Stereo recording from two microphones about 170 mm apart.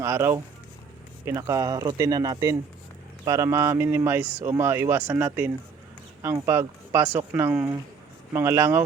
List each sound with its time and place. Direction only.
0.0 s speech: 15° right (ahead or behind)